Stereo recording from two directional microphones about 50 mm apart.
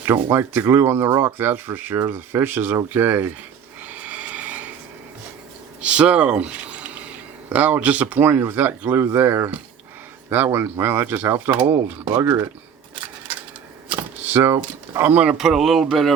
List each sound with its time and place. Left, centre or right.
0.0 s speech: right
3.8 s vehicle: right
5.8 s speech: right
9.0 s speech: right
14.3 s speech: right
15.0 s speech: right
15.4 s speech: centre